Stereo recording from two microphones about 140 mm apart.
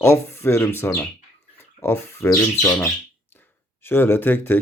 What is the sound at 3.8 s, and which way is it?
Speech, 15° left (ahead or behind).